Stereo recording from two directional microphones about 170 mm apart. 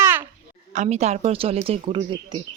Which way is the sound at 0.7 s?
40° right (ahead or behind).